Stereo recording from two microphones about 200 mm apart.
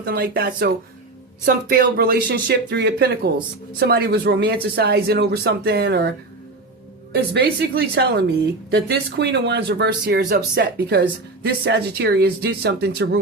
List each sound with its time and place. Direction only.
0.0 s speech: 50° right (ahead or behind)